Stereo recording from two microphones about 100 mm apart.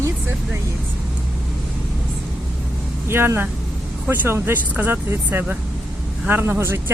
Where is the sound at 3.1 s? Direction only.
25° right (ahead or behind).